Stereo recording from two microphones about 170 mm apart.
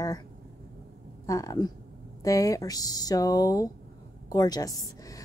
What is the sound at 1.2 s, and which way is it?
A woman's voice, 20° left (ahead or behind).